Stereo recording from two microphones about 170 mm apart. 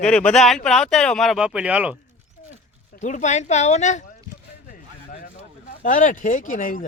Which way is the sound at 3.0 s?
45° left (ahead or behind).